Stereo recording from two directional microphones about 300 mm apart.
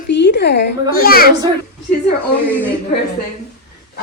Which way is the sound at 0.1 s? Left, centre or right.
Left.